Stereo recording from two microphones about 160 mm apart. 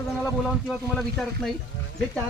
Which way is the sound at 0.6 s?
Centre (ahead or behind).